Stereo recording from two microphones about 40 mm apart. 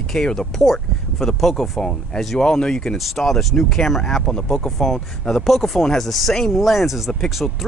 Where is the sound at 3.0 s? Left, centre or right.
Centre.